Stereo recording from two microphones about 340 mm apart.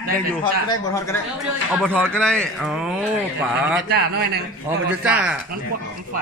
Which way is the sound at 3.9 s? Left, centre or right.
Right.